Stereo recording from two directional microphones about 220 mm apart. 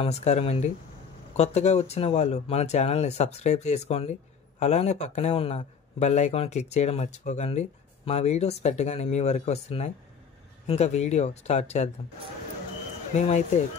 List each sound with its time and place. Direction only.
0.0 s speech: 30° left (ahead or behind)
13.1 s speech: 30° left (ahead or behind)